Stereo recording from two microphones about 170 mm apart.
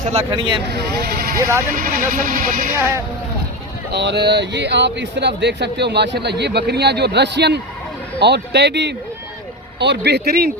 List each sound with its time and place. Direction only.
0.0 s speech: 40° right (ahead or behind)
0.7 s speech: 70° right (ahead or behind)
3.9 s speech: 80° right